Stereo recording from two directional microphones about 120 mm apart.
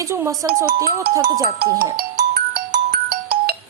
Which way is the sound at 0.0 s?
25° right (ahead or behind).